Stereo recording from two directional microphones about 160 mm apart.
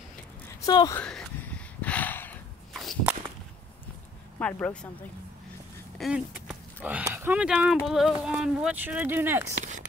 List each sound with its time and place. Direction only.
0.7 s speech: 25° left (ahead or behind)
0.9 s speech: 5° left (ahead or behind)
1.8 s a sound: 10° left (ahead or behind)
2.7 s whip: centre (ahead or behind)
4.4 s speech: 10° left (ahead or behind)
5.9 s speech: centre (ahead or behind)